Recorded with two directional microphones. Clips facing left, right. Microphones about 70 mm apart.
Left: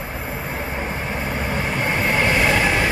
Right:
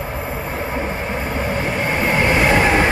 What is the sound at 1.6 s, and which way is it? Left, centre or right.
Train, centre.